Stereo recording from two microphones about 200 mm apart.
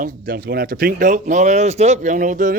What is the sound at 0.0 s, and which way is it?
A man's voice, 50° right (ahead or behind).